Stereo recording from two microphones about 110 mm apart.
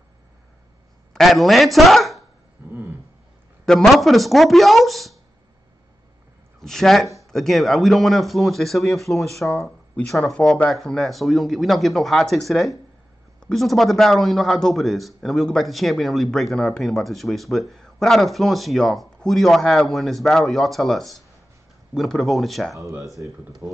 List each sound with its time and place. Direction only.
1.1 s speech: centre (ahead or behind)
3.6 s a man's voice: 5° left (ahead or behind)
6.6 s a man's voice: 5° left (ahead or behind)
23.2 s speech: 20° right (ahead or behind)